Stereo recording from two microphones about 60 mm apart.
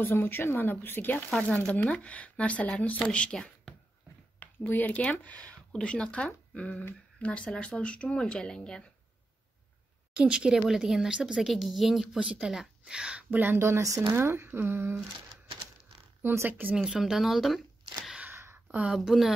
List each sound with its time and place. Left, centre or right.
0.0 s speech: left
1.9 s speech: left
4.4 s speech: left; by 8.8 s centre
10.1 s speech: centre
11.4 s speech: centre
12.2 s speech: centre
13.3 s speech: right
13.6 s speech: right
16.2 s speech: right
16.7 s speech: centre
18.3 s a sound: right
18.9 s speech: centre